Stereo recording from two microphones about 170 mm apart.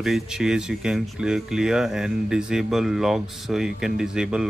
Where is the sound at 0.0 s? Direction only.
5° right (ahead or behind).